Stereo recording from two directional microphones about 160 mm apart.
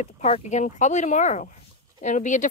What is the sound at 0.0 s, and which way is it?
Speech, 45° left (ahead or behind).